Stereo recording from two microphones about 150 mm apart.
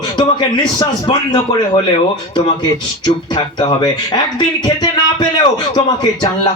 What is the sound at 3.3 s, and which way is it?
Speech, 30° left (ahead or behind).